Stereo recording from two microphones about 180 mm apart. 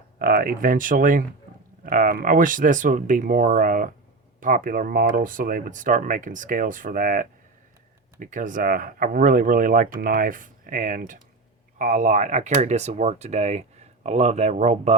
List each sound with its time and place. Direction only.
0.2 s speech: 50° right (ahead or behind)